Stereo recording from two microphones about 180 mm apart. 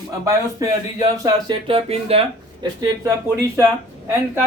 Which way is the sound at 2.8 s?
15° right (ahead or behind).